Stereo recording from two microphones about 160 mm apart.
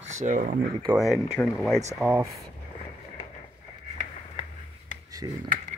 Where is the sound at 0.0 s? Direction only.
50° right (ahead or behind).